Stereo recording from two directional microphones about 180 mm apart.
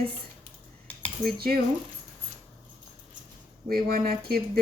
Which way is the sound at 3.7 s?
55° right (ahead or behind).